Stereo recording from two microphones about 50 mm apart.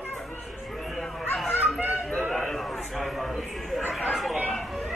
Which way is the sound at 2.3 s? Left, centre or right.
Centre.